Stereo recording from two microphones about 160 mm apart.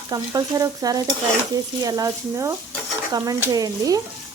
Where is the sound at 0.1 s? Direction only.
20° right (ahead or behind).